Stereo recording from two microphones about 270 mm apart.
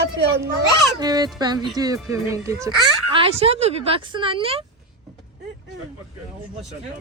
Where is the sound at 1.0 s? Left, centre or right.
Centre.